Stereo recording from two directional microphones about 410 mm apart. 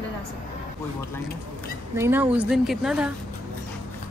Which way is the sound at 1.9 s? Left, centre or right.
Centre.